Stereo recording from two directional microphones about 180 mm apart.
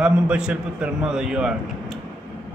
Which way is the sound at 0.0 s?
5° right (ahead or behind).